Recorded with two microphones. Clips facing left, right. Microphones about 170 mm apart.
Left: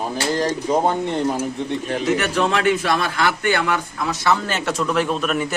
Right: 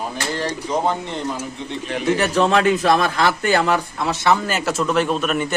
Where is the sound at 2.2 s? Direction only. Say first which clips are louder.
Right 3 dB; 35° right (ahead or behind).